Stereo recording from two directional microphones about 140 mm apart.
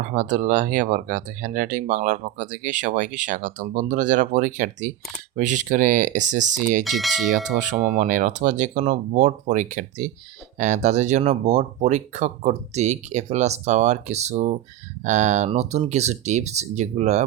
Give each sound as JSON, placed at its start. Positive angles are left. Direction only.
{"t": 0.0, "sound": "speech", "side_deg": -70}
{"t": 6.8, "sound": "speech", "side_deg": 0}
{"t": 7.6, "sound": "speech", "side_deg": -60}